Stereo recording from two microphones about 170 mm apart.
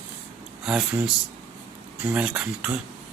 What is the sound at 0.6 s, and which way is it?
Speech, 5° right (ahead or behind).